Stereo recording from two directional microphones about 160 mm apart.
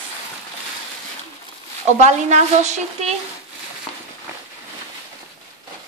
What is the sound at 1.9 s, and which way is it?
A woman's voice, 45° right (ahead or behind).